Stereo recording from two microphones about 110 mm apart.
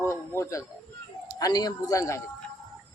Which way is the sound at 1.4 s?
35° left (ahead or behind).